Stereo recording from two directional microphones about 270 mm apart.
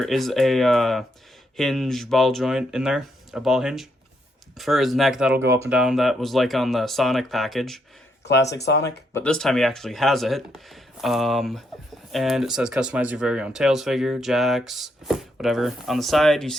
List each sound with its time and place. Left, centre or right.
0.0 s speech: centre
8.5 s speech: left
8.8 s speech: centre